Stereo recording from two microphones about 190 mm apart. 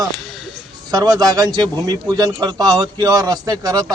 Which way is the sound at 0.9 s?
20° right (ahead or behind).